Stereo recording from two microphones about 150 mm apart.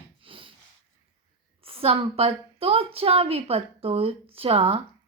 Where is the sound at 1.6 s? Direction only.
40° right (ahead or behind).